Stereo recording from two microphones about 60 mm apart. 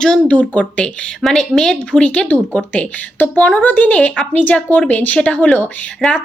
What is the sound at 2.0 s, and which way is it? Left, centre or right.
A woman's voice, left.